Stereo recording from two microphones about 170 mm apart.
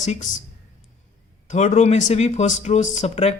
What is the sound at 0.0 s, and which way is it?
Speech, 45° left (ahead or behind).